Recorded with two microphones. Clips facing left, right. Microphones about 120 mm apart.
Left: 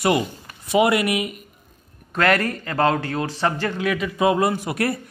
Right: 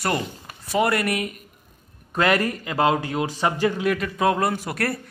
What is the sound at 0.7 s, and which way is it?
Speech, 10° left (ahead or behind).